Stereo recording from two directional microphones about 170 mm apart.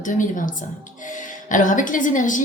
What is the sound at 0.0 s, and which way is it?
A woman's voice, 50° left (ahead or behind).